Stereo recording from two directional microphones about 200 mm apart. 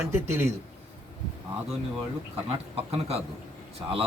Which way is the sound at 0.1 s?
10° right (ahead or behind).